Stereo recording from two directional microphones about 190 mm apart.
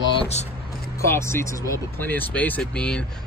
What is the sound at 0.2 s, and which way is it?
Vehicle, 35° left (ahead or behind).